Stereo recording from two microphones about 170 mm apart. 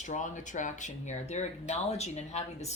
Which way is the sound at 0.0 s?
45° left (ahead or behind).